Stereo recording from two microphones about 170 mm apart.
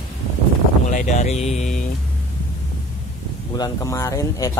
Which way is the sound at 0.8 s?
45° left (ahead or behind).